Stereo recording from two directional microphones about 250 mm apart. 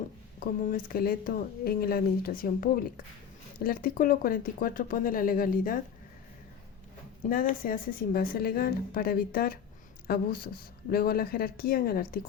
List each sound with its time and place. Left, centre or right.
0.3 s speech: left
7.3 s speech: left